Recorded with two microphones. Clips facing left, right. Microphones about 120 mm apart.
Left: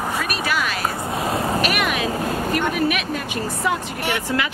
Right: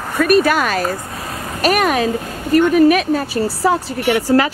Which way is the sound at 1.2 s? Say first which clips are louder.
Left 6 dB; 30° left (ahead or behind).